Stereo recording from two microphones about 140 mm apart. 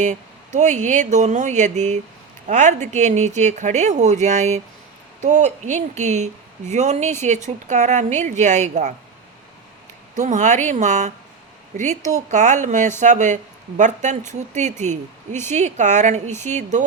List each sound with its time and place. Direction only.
0.0 s speech: 60° right (ahead or behind)
10.2 s speech: 60° right (ahead or behind)